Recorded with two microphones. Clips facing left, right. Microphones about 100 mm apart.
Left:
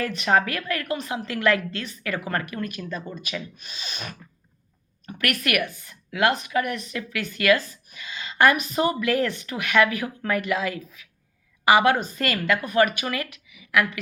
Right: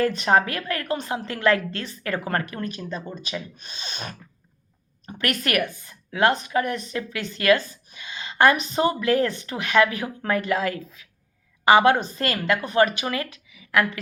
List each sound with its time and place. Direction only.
0.0 s a woman's voice: 35° right (ahead or behind)